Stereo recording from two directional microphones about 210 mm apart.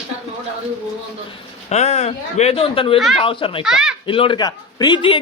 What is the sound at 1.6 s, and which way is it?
A man's voice, 30° left (ahead or behind).